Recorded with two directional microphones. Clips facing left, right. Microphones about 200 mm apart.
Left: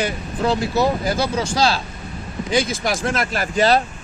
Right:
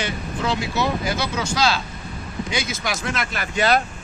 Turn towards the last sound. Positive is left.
turn(degrees=35)  # may be behind; listen again after turning